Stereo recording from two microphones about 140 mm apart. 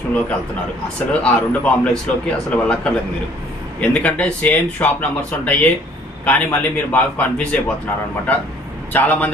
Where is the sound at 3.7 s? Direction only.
10° left (ahead or behind).